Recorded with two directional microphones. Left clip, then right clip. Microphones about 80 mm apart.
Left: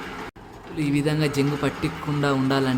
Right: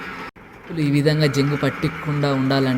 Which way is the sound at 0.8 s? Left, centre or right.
Right.